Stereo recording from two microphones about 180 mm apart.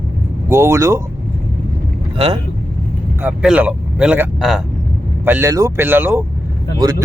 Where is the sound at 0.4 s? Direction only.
15° right (ahead or behind).